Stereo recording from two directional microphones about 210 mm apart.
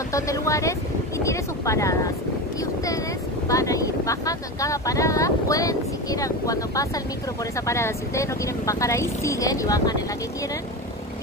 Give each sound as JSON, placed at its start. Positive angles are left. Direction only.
{"t": 0.1, "sound": "speech", "side_deg": 15}
{"t": 3.4, "sound": "speech", "side_deg": 15}